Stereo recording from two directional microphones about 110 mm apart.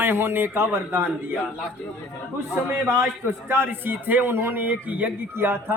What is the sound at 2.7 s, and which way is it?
A man's voice, 20° right (ahead or behind).